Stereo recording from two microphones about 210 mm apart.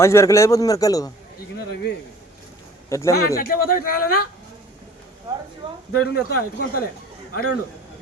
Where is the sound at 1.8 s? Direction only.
55° left (ahead or behind).